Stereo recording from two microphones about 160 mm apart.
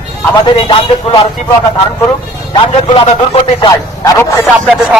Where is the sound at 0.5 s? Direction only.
40° left (ahead or behind).